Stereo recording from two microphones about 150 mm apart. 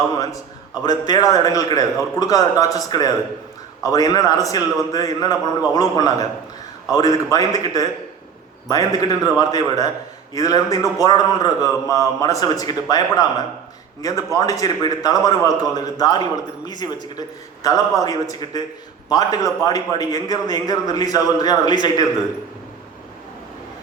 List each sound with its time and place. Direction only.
0.7 s a man's voice: 25° left (ahead or behind)